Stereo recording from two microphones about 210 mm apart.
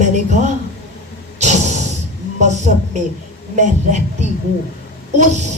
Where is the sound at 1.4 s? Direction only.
35° right (ahead or behind).